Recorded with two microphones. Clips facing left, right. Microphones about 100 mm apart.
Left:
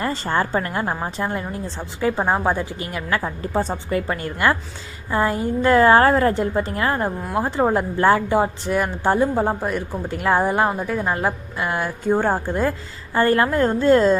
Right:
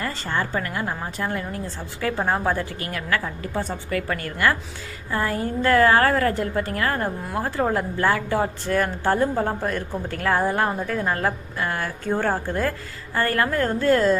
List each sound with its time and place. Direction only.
0.0 s a woman's voice: 30° left (ahead or behind)